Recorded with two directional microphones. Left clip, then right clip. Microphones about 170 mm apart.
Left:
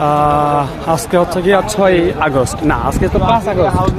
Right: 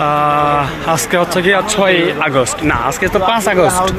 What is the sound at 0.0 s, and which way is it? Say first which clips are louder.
Speech: even; 15° left (ahead or behind).